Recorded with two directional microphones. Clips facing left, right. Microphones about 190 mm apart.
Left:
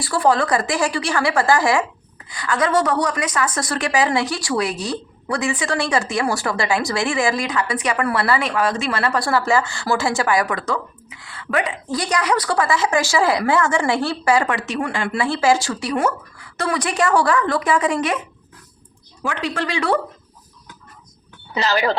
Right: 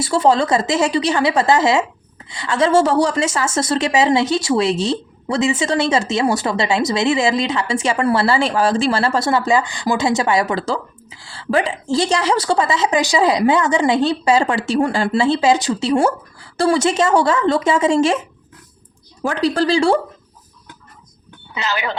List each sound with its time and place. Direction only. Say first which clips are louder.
0.0 s a woman's voice: right 3 dB; 25° right (ahead or behind)
19.2 s speech: right 7 dB; 35° right (ahead or behind)
21.5 s speech: left 4 dB; 35° left (ahead or behind)